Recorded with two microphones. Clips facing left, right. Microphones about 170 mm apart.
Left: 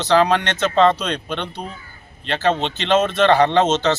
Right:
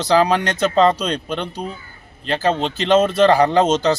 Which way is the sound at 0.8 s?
35° right (ahead or behind).